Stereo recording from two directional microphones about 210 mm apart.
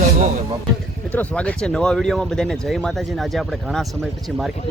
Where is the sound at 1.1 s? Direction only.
5° left (ahead or behind).